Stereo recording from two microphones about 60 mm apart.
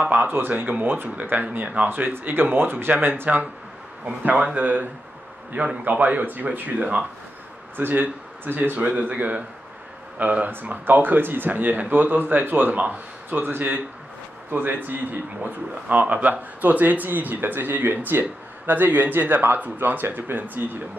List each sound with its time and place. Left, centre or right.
0.0 s speech: right
7.7 s speech: right
8.7 s speech: right